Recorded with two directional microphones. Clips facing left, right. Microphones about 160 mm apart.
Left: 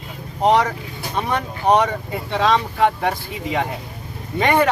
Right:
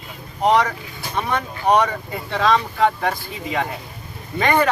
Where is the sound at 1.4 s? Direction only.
20° left (ahead or behind).